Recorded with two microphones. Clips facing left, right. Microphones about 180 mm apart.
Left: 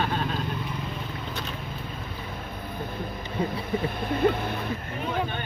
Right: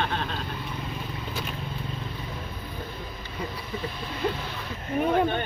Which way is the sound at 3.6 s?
55° left (ahead or behind).